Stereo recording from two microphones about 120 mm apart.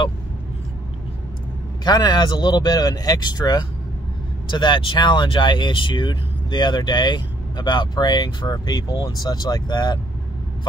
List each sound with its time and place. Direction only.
1.9 s speech: 35° left (ahead or behind)